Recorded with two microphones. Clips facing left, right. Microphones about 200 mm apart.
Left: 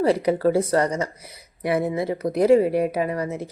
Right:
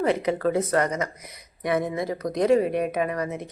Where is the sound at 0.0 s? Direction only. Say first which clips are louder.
Left 4 dB; 35° left (ahead or behind).